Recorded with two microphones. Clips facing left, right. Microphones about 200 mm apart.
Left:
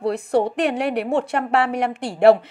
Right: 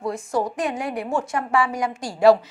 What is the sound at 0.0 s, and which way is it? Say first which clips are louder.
A woman's voice: left 5 dB; 65° left (ahead or behind).